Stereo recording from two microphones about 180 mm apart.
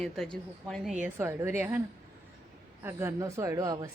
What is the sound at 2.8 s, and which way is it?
Speech, 15° right (ahead or behind).